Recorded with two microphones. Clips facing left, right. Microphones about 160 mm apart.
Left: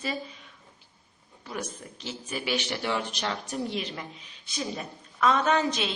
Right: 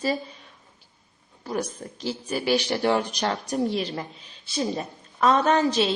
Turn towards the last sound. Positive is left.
turn(degrees=-35)  # may be behind; listen again after turning